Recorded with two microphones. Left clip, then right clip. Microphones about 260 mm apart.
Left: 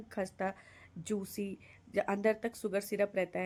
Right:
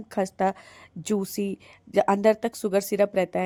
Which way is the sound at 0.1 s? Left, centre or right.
Right.